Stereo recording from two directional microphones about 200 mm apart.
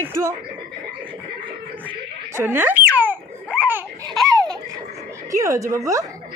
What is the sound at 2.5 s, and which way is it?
Speech, 10° right (ahead or behind).